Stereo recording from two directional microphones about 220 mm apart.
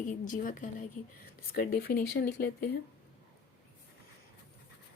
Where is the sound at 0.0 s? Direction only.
35° left (ahead or behind).